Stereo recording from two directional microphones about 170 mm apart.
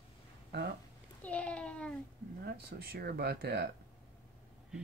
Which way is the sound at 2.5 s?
65° right (ahead or behind).